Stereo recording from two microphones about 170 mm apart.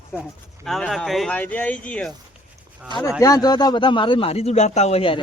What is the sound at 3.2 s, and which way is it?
A man's voice, 20° left (ahead or behind).